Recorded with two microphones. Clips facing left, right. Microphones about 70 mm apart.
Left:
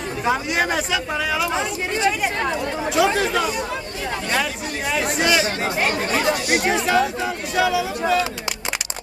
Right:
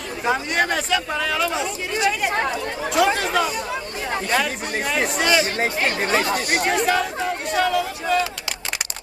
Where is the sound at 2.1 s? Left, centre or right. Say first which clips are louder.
Right 1 dB; centre.